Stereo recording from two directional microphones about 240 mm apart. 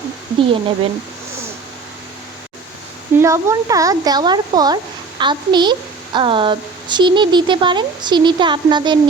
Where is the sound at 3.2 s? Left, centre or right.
Centre.